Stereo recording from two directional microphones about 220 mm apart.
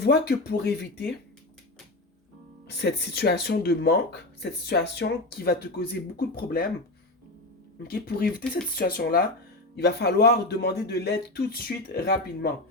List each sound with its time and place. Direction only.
0.0 s speech: 50° left (ahead or behind)
2.6 s speech: 50° left (ahead or behind)
7.9 s speech: 45° left (ahead or behind)